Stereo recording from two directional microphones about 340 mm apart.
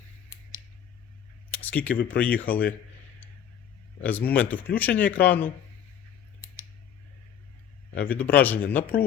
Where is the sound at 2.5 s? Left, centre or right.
Centre.